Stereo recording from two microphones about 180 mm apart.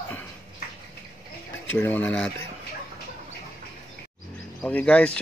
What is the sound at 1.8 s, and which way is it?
Speech, 10° left (ahead or behind).